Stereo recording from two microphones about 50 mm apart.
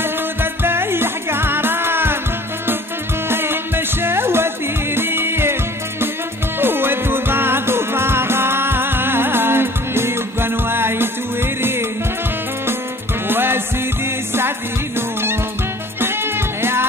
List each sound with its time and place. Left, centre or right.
0.0 s music: right
3.3 s music: right
13.3 s music: right